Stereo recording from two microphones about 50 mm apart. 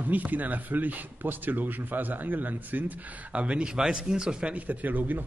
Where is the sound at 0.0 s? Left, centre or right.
Right.